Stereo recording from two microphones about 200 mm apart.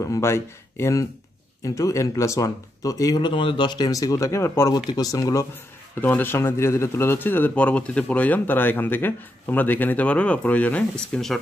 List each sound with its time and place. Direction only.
0.0 s speech: 15° left (ahead or behind)